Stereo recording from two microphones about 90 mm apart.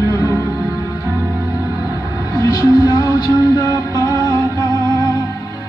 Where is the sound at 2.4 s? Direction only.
45° left (ahead or behind).